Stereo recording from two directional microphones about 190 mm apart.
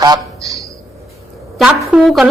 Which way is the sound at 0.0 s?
20° right (ahead or behind).